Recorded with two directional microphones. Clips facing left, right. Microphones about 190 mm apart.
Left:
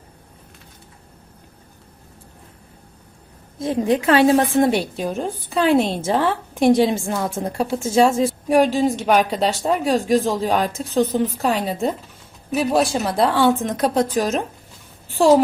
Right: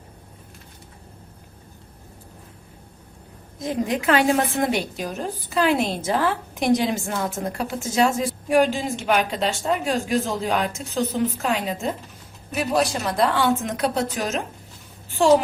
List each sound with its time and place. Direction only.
3.6 s a woman's voice: 30° left (ahead or behind)